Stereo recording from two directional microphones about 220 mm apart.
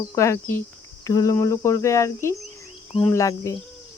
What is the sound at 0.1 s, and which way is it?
Speech, 15° left (ahead or behind).